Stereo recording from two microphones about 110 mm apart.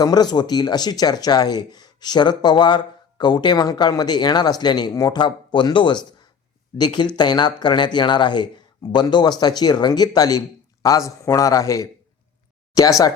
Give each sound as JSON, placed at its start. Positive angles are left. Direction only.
{"t": 0.0, "sound": "speech", "side_deg": 40}